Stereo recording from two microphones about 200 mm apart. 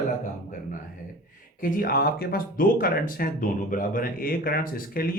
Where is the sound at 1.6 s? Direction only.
45° left (ahead or behind).